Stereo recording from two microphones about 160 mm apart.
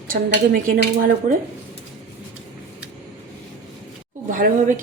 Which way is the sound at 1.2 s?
55° right (ahead or behind).